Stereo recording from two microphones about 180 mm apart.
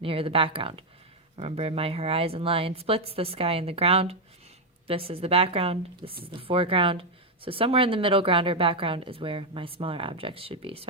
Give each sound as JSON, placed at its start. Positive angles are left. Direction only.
{"t": 0.0, "sound": "a woman's voice", "side_deg": -30}